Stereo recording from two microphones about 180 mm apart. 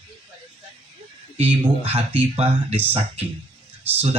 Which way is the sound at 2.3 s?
35° right (ahead or behind).